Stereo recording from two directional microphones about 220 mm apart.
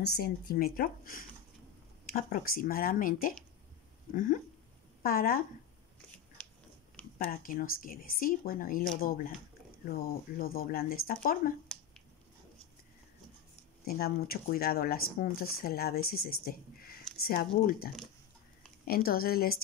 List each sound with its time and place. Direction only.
0.0 s speech: 45° left (ahead or behind)
7.2 s speech: 40° left (ahead or behind)
11.7 s finger snapping: 5° left (ahead or behind)
13.8 s speech: 45° left (ahead or behind)